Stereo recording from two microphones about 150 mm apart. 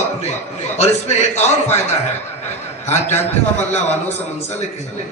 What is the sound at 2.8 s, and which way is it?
Speech, 50° left (ahead or behind).